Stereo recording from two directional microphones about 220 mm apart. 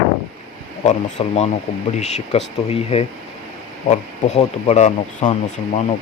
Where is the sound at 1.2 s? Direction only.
25° left (ahead or behind).